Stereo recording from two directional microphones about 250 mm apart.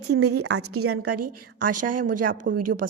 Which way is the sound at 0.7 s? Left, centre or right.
Right.